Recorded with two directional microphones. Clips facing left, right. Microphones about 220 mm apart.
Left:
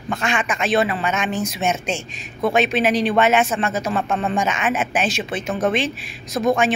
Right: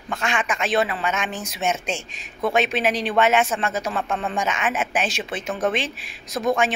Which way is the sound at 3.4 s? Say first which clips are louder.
Left 3 dB; 30° left (ahead or behind).